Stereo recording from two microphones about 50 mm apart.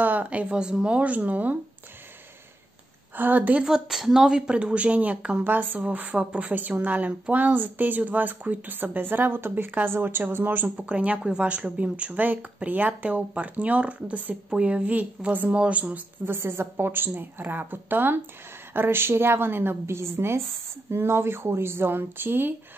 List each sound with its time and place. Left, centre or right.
0.0 s speech: right
3.2 s speech: right
3.6 s a woman's voice: centre; by 5.4 s right
5.4 s speech: right
10.9 s speech: right
16.3 s speech: right